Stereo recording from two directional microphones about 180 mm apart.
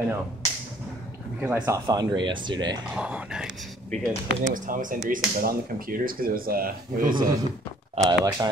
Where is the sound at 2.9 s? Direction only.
5° right (ahead or behind).